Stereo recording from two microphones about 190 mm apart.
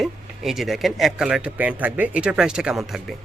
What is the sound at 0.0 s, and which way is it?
Speech, centre (ahead or behind).